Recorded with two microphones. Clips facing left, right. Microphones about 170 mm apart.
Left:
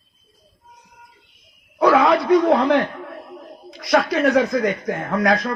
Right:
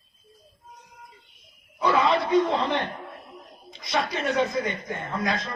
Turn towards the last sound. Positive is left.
turn(degrees=70)  # may be behind; listen again after turning